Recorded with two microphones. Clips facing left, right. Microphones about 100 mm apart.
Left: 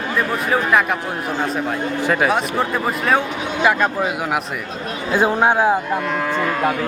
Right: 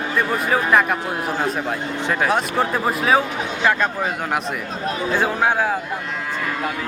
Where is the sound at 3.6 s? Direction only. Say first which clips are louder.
Left 2 dB; 10° left (ahead or behind).